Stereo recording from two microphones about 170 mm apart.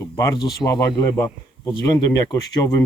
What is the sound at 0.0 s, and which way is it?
A man's voice, 20° left (ahead or behind).